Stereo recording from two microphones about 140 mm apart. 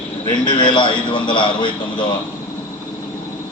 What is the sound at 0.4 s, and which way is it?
A man's voice, 35° left (ahead or behind).